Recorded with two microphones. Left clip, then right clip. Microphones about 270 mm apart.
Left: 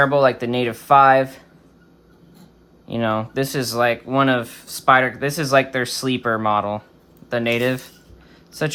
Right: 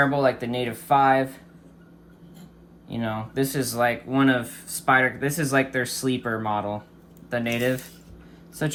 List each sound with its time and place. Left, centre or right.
0.0 s speech: left
2.8 s speech: left